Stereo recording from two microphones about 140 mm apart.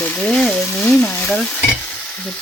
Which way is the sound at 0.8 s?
15° left (ahead or behind).